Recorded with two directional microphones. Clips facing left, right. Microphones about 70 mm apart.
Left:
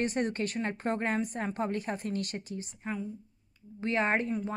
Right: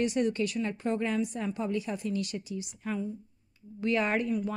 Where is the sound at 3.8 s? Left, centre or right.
Left.